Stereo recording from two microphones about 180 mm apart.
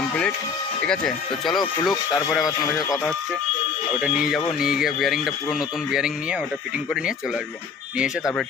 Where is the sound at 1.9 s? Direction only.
20° left (ahead or behind).